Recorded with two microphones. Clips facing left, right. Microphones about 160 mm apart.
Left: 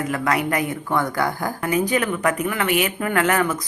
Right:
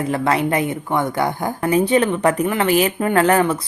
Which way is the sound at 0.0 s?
30° right (ahead or behind).